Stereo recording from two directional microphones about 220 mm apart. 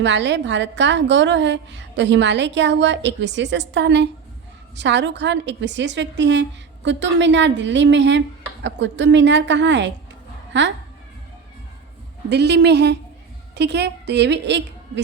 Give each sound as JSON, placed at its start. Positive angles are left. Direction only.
{"t": 0.0, "sound": "a woman's voice", "side_deg": -55}
{"t": 12.3, "sound": "a woman's voice", "side_deg": -50}